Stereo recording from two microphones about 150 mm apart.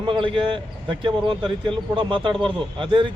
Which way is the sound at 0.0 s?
35° right (ahead or behind).